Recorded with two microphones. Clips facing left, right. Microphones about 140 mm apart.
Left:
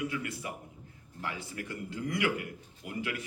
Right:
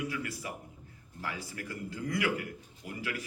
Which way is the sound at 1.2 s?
25° left (ahead or behind).